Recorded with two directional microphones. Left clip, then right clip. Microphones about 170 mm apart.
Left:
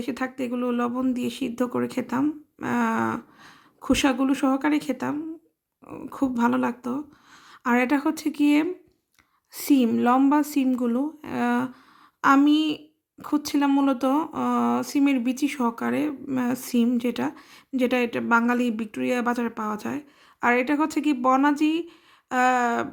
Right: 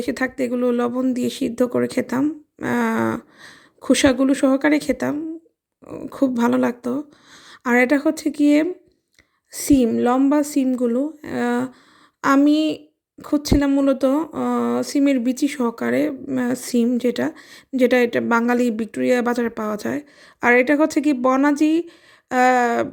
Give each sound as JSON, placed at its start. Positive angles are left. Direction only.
{"t": 0.0, "sound": "a woman's voice", "side_deg": -25}